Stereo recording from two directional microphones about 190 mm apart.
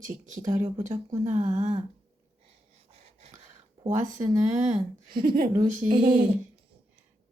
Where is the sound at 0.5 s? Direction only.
10° right (ahead or behind).